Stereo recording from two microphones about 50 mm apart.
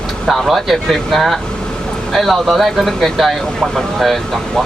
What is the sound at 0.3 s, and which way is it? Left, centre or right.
Speech, centre.